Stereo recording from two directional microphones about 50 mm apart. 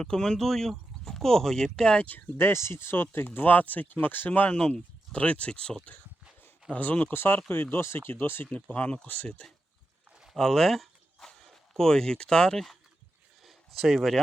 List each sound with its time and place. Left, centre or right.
0.0 s speech: centre
2.4 s speech: left
4.3 s speech: left
6.7 s speech: left
7.1 s speech: left
8.7 s speech: left
10.3 s speech: centre
13.4 s a sound: centre